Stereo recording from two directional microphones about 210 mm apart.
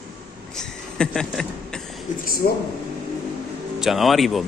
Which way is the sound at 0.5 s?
5° left (ahead or behind).